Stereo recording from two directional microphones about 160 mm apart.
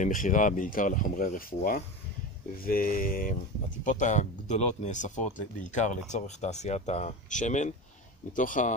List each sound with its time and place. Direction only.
0.0 s speech: 55° left (ahead or behind)